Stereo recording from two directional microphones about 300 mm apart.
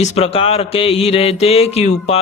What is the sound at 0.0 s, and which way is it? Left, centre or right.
Mantra, left.